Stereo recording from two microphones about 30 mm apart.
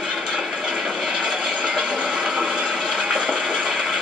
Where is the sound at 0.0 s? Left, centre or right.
Right.